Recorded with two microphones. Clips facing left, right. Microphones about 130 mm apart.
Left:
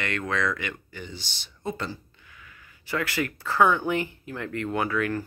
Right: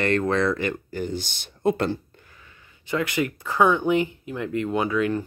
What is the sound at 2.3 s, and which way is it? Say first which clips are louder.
Speech: left 1 dB; 25° right (ahead or behind).